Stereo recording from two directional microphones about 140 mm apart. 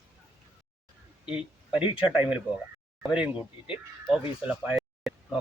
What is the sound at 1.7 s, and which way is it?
Speech, 40° left (ahead or behind).